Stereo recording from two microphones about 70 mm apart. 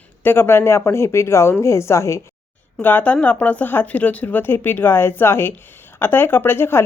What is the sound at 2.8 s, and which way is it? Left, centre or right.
Speech, left.